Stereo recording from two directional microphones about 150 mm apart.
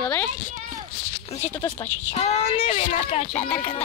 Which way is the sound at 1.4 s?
15° left (ahead or behind).